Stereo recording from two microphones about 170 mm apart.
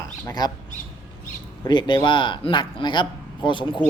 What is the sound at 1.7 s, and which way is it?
A man's voice, 30° left (ahead or behind).